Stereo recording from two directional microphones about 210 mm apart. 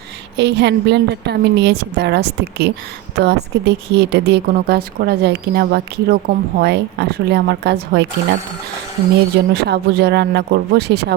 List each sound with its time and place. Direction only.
0.3 s speech: 55° right (ahead or behind)
9.5 s speech: 50° right (ahead or behind)